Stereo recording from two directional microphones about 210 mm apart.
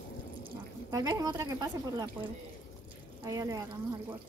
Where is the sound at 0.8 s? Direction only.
15° right (ahead or behind).